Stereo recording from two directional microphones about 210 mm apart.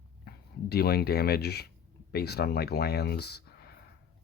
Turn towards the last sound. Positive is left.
turn(degrees=50)  # may be behind; listen again after turning